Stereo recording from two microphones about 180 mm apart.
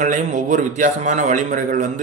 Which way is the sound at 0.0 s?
45° right (ahead or behind).